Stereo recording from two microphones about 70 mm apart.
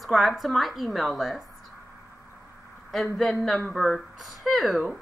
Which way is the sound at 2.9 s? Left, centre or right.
Centre.